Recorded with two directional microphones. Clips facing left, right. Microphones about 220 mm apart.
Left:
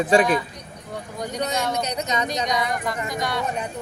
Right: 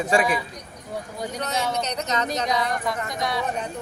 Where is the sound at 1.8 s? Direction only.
10° left (ahead or behind).